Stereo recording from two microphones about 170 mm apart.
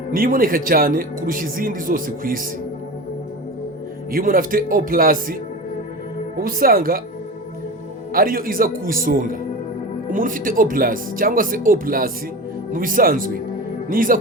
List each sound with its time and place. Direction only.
0.1 s speech: 55° right (ahead or behind)
4.1 s speech: 55° right (ahead or behind)
8.1 s speech: 60° right (ahead or behind)